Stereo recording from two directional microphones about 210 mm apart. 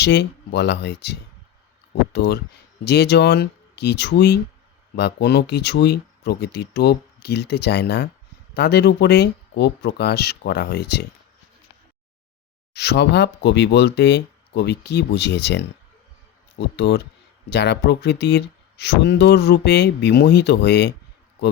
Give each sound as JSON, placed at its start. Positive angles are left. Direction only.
{"t": 0.0, "sound": "speech", "side_deg": 55}
{"t": 2.1, "sound": "speech", "side_deg": 55}
{"t": 12.7, "sound": "speech", "side_deg": 50}